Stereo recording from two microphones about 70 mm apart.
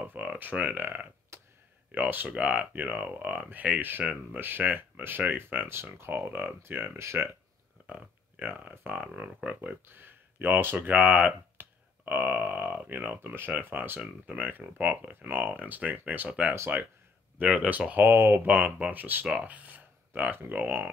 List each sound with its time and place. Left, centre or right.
0.0 s a sound: right
1.3 s a sound: right
1.9 s speech: right
7.8 s speech: right
16.5 s speech: right
17.4 s speech: right